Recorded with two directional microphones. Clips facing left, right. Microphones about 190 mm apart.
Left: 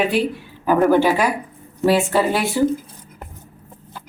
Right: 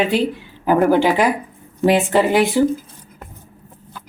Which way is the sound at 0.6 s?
15° right (ahead or behind).